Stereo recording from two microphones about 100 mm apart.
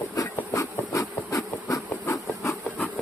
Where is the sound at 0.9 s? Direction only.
35° left (ahead or behind).